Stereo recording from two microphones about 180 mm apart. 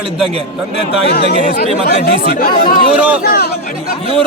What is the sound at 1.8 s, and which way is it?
Speech, 60° left (ahead or behind).